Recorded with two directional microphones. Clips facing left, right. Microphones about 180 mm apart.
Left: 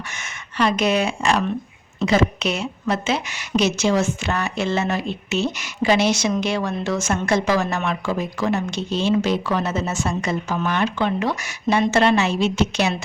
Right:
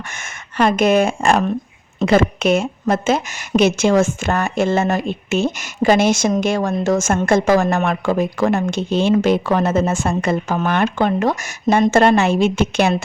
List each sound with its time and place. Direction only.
0.5 s a woman's voice: 50° right (ahead or behind)